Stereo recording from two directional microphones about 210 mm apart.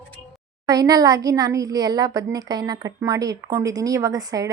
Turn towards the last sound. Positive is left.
turn(degrees=-15)  # may be behind; listen again after turning